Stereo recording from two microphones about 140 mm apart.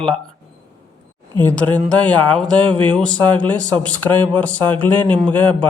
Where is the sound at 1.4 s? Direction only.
10° left (ahead or behind).